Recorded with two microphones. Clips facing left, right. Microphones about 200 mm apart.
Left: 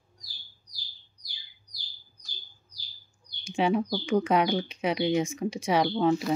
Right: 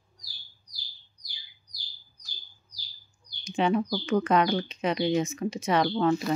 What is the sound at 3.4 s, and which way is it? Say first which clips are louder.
Speech: even; 10° left (ahead or behind).